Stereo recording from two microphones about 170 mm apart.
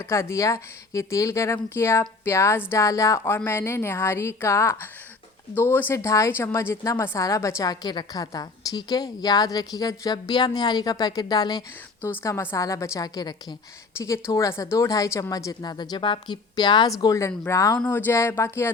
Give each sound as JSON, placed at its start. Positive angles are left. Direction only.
{"t": 0.0, "sound": "a woman's voice", "side_deg": 15}